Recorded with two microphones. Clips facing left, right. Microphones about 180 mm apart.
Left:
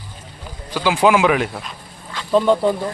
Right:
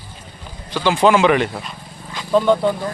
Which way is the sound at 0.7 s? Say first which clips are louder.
Right 1 dB; 10° left (ahead or behind).